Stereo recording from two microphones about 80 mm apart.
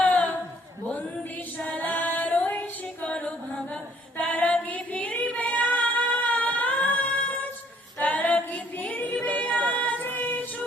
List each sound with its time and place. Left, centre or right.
0.0 s a sound: centre
1.5 s female singing: centre
3.1 s music: centre
4.2 s singing: centre
7.9 s a capella: left